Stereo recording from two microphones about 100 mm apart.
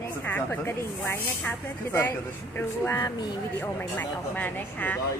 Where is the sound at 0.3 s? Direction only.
20° left (ahead or behind).